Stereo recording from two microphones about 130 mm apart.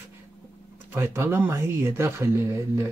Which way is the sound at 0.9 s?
20° right (ahead or behind).